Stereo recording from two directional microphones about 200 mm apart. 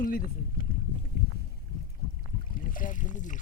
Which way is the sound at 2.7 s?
40° left (ahead or behind).